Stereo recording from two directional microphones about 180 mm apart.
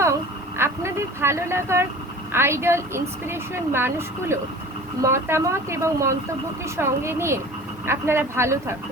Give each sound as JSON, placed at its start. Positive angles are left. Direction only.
{"t": 0.0, "sound": "vehicle", "side_deg": -15}
{"t": 2.3, "sound": "speech", "side_deg": -15}